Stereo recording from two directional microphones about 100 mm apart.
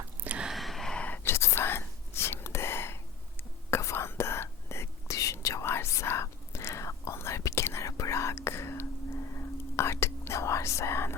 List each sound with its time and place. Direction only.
0.3 s whispering: 5° right (ahead or behind); by 11.1 s 25° left (ahead or behind)